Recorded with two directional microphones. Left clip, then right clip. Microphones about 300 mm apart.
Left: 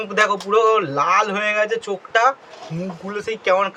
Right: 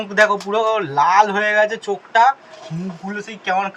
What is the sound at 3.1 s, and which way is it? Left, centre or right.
Speech, centre.